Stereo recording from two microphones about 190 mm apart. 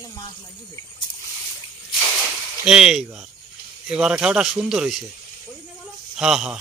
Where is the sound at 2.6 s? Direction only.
5° right (ahead or behind).